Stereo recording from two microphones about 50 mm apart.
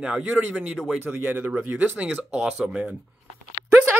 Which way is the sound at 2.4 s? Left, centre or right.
Centre.